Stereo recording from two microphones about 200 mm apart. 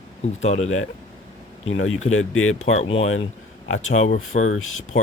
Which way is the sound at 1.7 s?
90° left.